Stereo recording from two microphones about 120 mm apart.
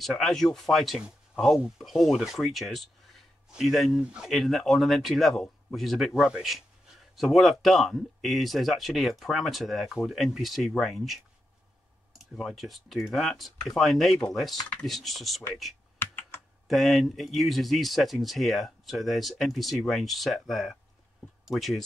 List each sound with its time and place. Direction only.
0.0 s speech: centre (ahead or behind)
16.0 s computer keyboard: 15° left (ahead or behind)
16.6 s speech: centre (ahead or behind)